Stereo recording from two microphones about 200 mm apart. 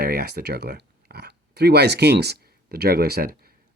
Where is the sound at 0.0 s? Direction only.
50° right (ahead or behind).